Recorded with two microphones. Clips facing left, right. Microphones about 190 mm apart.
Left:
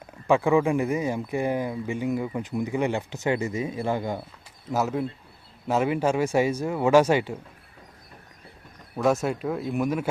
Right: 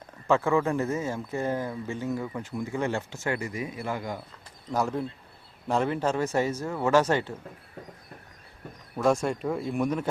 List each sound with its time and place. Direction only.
0.3 s speech: 15° left (ahead or behind)
4.7 s speech: 5° left (ahead or behind)
9.2 s speech: 5° left (ahead or behind)